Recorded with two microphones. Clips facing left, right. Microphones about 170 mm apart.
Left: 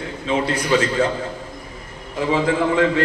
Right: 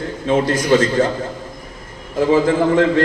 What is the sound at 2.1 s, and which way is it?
Speech, 50° right (ahead or behind).